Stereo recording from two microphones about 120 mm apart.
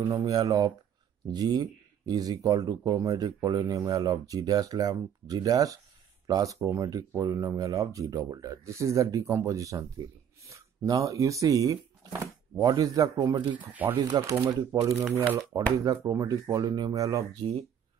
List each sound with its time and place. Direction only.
0.1 s speech: 30° right (ahead or behind)
13.6 s speech: 15° right (ahead or behind)
14.0 s speech: 30° right (ahead or behind)
15.8 s speech: 30° right (ahead or behind)